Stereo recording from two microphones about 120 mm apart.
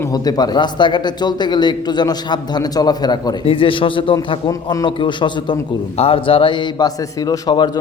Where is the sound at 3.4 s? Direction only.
45° left (ahead or behind).